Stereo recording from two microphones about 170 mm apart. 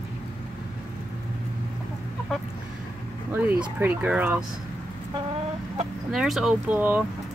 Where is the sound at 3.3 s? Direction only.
10° right (ahead or behind).